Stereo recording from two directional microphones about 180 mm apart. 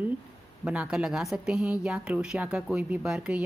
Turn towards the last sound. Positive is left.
turn(degrees=-5)  # may be behind; listen again after turning